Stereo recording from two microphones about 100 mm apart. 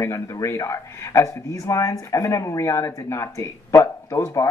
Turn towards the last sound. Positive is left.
turn(degrees=30)  # may be behind; listen again after turning